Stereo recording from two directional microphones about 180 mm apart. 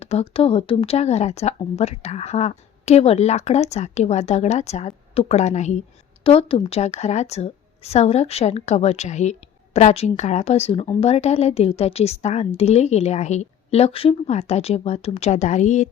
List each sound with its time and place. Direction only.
0.0 s speech: 35° left (ahead or behind)